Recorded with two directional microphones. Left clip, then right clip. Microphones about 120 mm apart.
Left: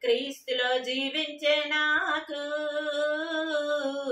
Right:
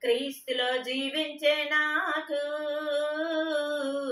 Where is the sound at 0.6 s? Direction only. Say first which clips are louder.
Left 2 dB; 20° left (ahead or behind).